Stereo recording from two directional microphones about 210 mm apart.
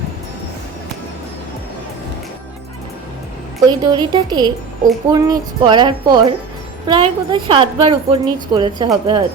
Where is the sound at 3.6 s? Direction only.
20° right (ahead or behind).